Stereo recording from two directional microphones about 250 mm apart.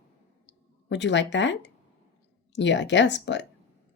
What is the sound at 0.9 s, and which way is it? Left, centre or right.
Speech, left.